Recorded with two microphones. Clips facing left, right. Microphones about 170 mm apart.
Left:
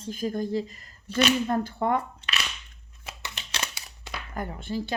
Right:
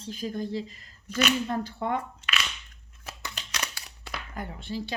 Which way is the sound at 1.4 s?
50° left (ahead or behind).